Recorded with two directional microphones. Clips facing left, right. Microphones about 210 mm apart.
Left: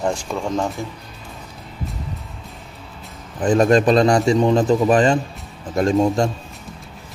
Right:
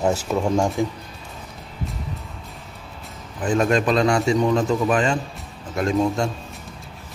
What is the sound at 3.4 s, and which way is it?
A man's voice, 35° left (ahead or behind).